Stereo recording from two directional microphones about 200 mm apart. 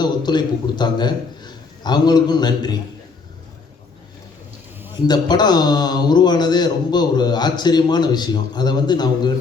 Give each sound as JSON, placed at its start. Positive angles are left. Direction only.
{"t": 0.0, "sound": "a man's voice", "side_deg": 20}
{"t": 5.0, "sound": "a man's voice", "side_deg": 20}